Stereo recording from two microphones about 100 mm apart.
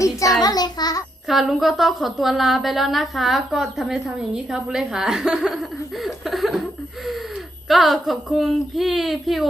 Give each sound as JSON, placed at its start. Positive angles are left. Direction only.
{"t": 0.0, "sound": "child singing", "side_deg": 35}
{"t": 1.3, "sound": "a woman's voice", "side_deg": 0}
{"t": 6.0, "sound": "laughter", "side_deg": 0}
{"t": 7.7, "sound": "a woman's voice", "side_deg": 0}